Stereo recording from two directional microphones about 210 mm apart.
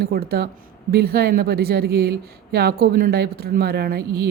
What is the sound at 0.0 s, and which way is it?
Speech, 45° right (ahead or behind).